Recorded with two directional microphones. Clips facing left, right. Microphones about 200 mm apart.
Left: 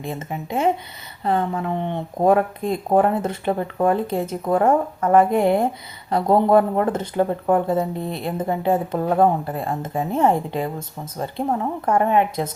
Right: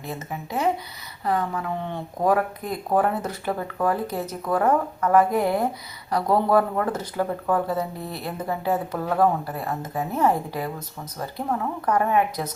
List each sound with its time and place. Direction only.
0.0 s speech: 25° left (ahead or behind)